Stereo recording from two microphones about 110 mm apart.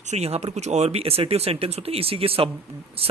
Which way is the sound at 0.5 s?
90° right.